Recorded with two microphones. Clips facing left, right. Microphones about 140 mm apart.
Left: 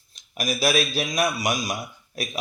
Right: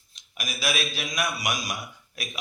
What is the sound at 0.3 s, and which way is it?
Speech, 40° left (ahead or behind).